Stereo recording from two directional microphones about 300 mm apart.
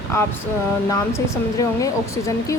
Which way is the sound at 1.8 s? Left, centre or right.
Centre.